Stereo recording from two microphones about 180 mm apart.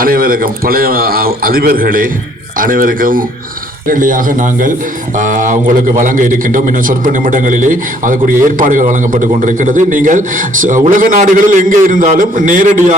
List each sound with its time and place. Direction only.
0.0 s a man's voice: 55° right (ahead or behind)